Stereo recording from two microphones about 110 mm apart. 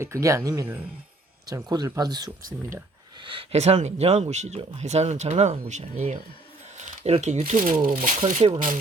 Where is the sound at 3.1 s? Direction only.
50° right (ahead or behind).